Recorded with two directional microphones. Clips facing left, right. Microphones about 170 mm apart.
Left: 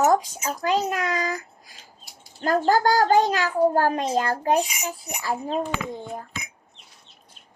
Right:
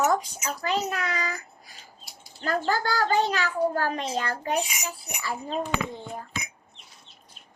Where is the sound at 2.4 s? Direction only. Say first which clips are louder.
Left 7 dB; 45° left (ahead or behind).